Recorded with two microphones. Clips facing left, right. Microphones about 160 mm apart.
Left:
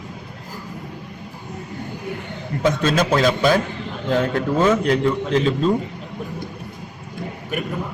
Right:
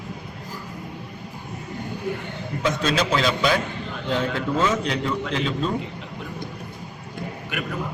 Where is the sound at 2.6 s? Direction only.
50° left (ahead or behind).